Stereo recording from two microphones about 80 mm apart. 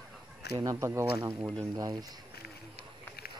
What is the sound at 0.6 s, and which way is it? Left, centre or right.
Speech, right.